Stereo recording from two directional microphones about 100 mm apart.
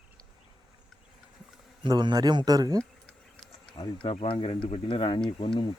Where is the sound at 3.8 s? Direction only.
55° left (ahead or behind).